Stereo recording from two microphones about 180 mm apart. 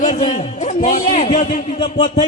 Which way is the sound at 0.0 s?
35° left (ahead or behind).